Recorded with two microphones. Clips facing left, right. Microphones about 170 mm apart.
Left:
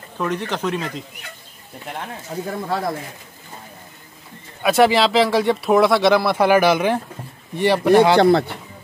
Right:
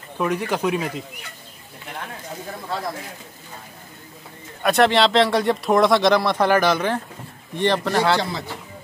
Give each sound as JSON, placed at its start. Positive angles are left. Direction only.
{"t": 0.2, "sound": "speech", "side_deg": -10}
{"t": 2.3, "sound": "speech", "side_deg": 40}
{"t": 4.6, "sound": "speech", "side_deg": 5}
{"t": 8.2, "sound": "speech", "side_deg": 60}